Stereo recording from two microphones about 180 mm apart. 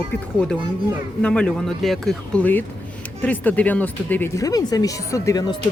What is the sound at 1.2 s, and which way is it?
A man's voice, 5° left (ahead or behind).